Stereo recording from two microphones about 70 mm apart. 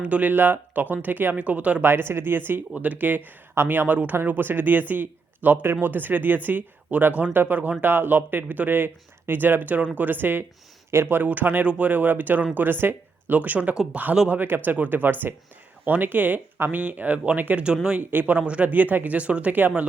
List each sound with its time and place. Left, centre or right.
0.0 s speech: right
1.8 s speech: right
11.2 s speech: right